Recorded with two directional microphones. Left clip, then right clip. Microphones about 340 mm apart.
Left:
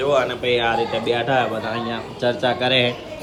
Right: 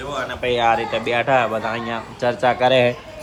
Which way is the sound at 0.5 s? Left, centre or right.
Centre.